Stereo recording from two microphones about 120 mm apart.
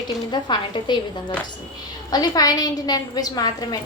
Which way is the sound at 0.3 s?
40° left (ahead or behind).